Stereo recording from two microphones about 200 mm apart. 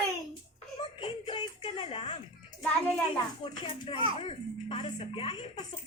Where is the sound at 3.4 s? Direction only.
25° left (ahead or behind).